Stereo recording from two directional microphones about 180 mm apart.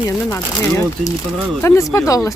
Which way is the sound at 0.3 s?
15° left (ahead or behind).